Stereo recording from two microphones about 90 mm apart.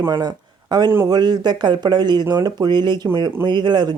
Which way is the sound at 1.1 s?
50° right (ahead or behind).